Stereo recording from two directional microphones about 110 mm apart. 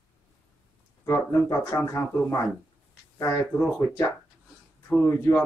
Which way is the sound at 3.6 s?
15° left (ahead or behind).